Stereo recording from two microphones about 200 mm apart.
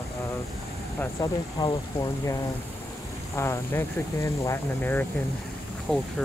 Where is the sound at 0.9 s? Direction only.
15° left (ahead or behind).